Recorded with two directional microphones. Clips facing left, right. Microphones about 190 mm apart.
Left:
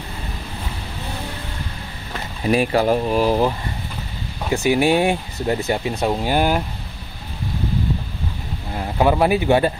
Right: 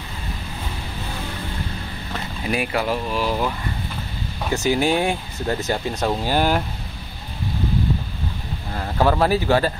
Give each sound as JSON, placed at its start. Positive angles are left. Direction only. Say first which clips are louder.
{"t": 2.4, "sound": "speech", "louder": "left 6 dB", "side_deg": 35}
{"t": 4.6, "sound": "speech", "louder": "left 3 dB", "side_deg": 15}
{"t": 5.9, "sound": "speech", "louder": "left 1 dB", "side_deg": 10}
{"t": 8.7, "sound": "speech", "louder": "left 2 dB", "side_deg": 15}